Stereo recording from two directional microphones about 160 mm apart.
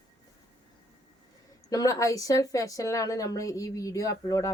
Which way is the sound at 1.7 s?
20° left (ahead or behind).